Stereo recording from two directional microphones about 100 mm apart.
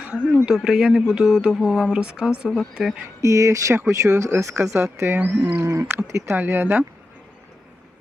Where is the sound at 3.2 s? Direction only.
30° right (ahead or behind).